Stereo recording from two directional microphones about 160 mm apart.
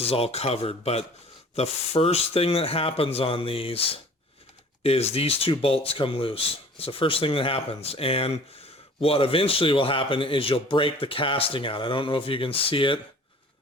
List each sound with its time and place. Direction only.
0.0 s speech: 40° left (ahead or behind)